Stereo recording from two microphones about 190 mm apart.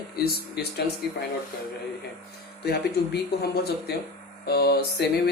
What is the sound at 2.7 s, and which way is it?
A man's voice, 55° left (ahead or behind).